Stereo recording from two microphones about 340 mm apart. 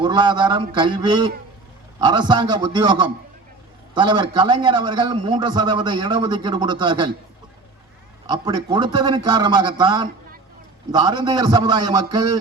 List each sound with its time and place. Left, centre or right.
0.0 s a man's voice: centre
8.3 s a man's voice: centre